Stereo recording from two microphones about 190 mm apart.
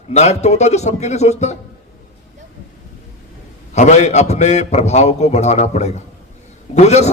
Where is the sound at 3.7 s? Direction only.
40° left (ahead or behind).